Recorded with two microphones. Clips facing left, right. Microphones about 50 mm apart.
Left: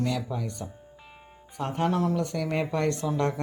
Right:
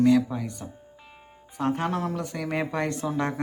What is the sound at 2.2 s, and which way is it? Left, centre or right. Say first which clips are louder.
Speech: left 1 dB; centre.